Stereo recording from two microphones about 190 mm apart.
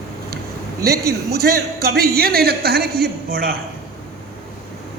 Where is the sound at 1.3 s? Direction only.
55° right (ahead or behind).